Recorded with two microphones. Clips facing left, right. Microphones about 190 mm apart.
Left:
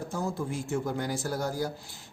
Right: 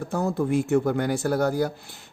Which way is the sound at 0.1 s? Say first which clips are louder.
Right 10 dB; 65° right (ahead or behind).